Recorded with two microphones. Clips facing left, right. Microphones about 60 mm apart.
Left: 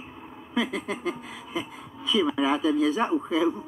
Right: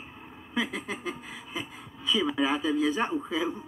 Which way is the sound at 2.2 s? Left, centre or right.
Right.